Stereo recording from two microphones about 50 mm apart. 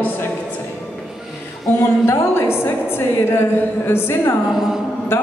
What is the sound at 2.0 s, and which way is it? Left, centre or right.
A woman's voice, left.